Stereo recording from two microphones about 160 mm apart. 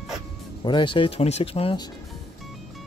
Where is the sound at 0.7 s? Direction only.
30° left (ahead or behind).